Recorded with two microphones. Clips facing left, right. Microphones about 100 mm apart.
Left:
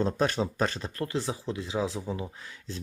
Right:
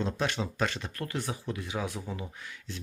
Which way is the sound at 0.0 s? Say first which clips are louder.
Left 4 dB; 40° left (ahead or behind).